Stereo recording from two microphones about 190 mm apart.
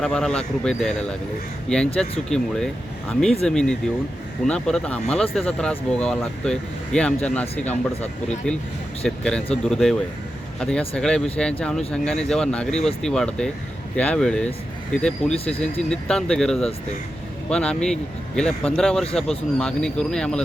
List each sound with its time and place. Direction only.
0.0 s speech: 5° left (ahead or behind)
7.7 s speech: 35° left (ahead or behind)
9.0 s speech: 5° left (ahead or behind)